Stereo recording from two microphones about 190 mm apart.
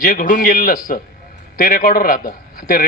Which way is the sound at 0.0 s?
45° left (ahead or behind).